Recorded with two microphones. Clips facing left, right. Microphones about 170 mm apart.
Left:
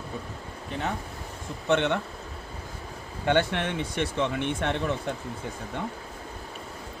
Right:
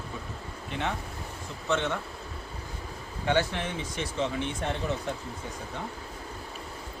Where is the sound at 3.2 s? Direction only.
60° left (ahead or behind).